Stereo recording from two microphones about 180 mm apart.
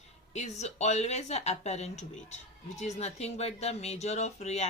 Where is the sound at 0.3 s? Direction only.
40° left (ahead or behind).